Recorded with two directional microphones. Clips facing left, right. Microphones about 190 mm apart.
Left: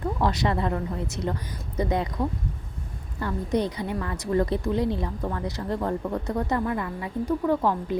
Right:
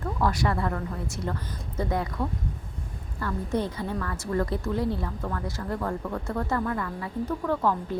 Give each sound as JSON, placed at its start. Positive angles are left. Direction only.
{"t": 0.0, "sound": "a woman's voice", "side_deg": 20}